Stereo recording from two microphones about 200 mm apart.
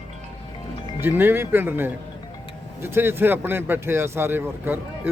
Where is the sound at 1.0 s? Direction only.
10° right (ahead or behind).